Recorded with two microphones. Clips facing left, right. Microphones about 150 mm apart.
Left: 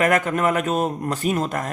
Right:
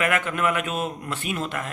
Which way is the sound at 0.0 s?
40° left (ahead or behind).